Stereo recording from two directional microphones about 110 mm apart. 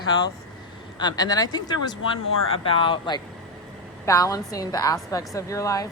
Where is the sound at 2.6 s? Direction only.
50° left (ahead or behind).